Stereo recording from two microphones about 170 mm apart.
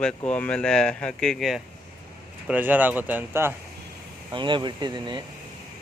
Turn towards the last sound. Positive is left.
turn(degrees=-25)  # may be behind; listen again after turning